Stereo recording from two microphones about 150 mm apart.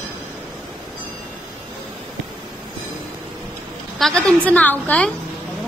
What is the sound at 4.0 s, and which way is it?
A woman's voice, centre (ahead or behind).